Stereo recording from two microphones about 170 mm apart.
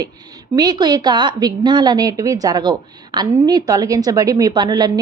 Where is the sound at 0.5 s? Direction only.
25° right (ahead or behind).